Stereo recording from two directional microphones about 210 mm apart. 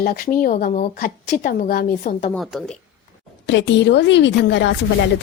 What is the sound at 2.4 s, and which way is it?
Speech, centre (ahead or behind).